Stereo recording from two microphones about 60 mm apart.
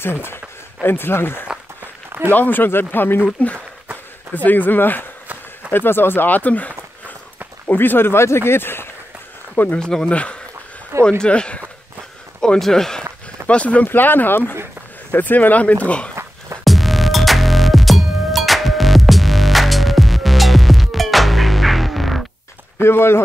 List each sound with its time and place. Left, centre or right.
0.0 s a man's voice: left
4.3 s a man's voice: left
9.8 s speech: centre
13.5 s speech: left
13.8 s a man's voice: left
16.6 s music: centre
22.8 s speech: left